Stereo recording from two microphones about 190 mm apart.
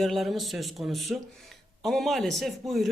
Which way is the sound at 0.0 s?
Centre (ahead or behind).